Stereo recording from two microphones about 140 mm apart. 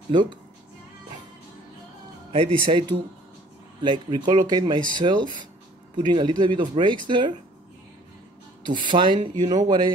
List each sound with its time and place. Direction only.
0.1 s speech: 35° right (ahead or behind)
2.3 s speech: 35° right (ahead or behind)
8.6 s speech: 35° right (ahead or behind)